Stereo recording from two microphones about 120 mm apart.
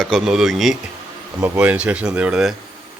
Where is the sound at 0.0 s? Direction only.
Centre (ahead or behind).